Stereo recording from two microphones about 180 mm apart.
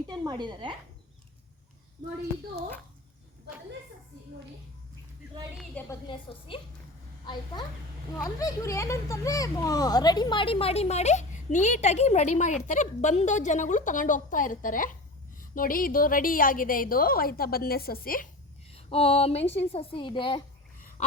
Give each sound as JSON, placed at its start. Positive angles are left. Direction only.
{"t": 0.1, "sound": "a woman's voice", "side_deg": -25}
{"t": 5.9, "sound": "speech", "side_deg": 25}
{"t": 8.4, "sound": "a woman's voice", "side_deg": 20}
{"t": 18.7, "sound": "a woman's voice", "side_deg": 35}